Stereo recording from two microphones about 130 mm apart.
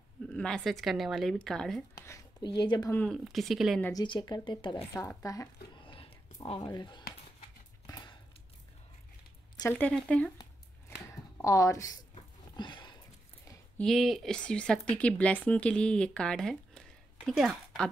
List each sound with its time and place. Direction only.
0.3 s speech: 5° left (ahead or behind)
2.0 s speech: 25° left (ahead or behind)
3.1 s speech: centre (ahead or behind)
3.9 s speech: 35° left (ahead or behind)
4.9 s speech: 25° left (ahead or behind)
5.8 s a sound: 40° left (ahead or behind)
6.4 s speech: 40° left (ahead or behind)
7.8 s a sound: 30° left (ahead or behind)
9.7 s speech: 15° left (ahead or behind)
11.4 s speech: 25° left (ahead or behind)
12.5 s sniff: 35° left (ahead or behind)
13.7 s speech: centre (ahead or behind)